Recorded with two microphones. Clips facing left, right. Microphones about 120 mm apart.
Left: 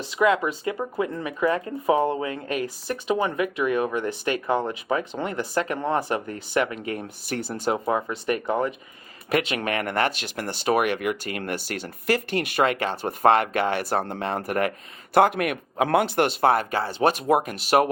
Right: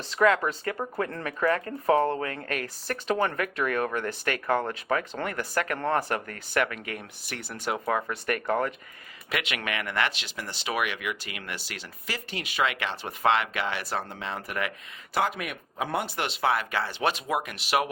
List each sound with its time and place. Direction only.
0.1 s speech: 15° left (ahead or behind); by 7.8 s 35° left (ahead or behind)
7.9 s speech: 20° left (ahead or behind)
9.3 s speech: 35° left (ahead or behind)
15.1 s speech: 60° left (ahead or behind); by 16.1 s 85° left
16.1 s speech: 50° left (ahead or behind)